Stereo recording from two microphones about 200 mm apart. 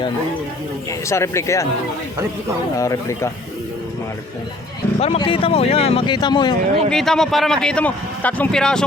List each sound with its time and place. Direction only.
0.9 s speech: 15° left (ahead or behind)
2.7 s speech: 15° left (ahead or behind)
4.9 s speech: 30° left (ahead or behind)
6.9 s a man's voice: centre (ahead or behind)